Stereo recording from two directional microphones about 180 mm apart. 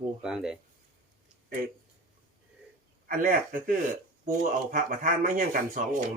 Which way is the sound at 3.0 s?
50° right (ahead or behind).